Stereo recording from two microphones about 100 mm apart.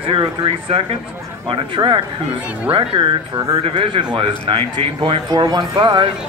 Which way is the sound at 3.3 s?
35° right (ahead or behind).